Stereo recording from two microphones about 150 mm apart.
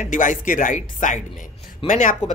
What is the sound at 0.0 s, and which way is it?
Speech, 60° left (ahead or behind).